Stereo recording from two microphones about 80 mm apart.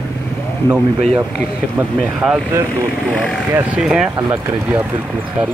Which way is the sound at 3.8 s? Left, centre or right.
Centre.